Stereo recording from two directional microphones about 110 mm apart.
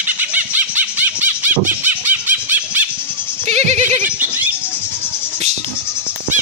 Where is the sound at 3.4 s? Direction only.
90° right.